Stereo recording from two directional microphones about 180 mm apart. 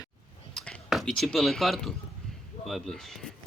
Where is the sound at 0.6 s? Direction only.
Centre (ahead or behind).